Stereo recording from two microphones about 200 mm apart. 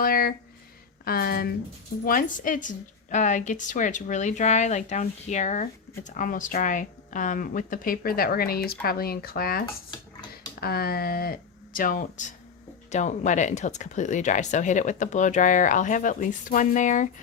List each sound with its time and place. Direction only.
0.0 s a woman's voice: 45° left (ahead or behind)